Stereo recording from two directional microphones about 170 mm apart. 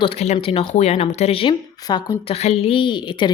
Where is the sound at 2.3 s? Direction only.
35° left (ahead or behind).